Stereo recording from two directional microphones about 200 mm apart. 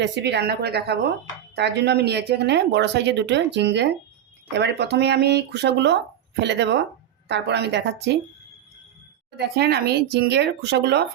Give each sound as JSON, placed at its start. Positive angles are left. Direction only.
{"t": 0.0, "sound": "speech", "side_deg": -60}
{"t": 9.6, "sound": "speech", "side_deg": -55}